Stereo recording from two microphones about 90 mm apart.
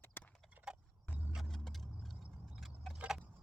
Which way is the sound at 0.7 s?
10° right (ahead or behind).